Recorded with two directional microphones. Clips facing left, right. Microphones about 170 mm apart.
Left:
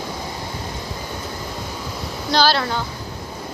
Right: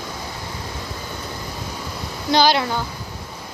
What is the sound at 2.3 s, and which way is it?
Speech, 15° right (ahead or behind).